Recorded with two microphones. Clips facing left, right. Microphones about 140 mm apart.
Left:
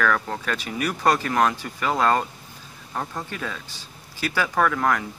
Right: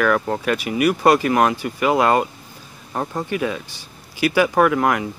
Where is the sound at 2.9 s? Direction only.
25° right (ahead or behind).